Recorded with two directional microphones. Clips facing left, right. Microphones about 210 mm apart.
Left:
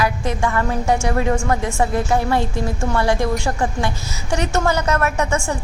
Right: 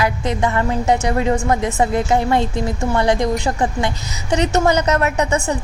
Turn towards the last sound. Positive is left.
turn(degrees=-20)  # may be behind; listen again after turning